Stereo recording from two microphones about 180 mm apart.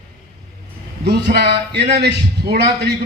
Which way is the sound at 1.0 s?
65° right (ahead or behind).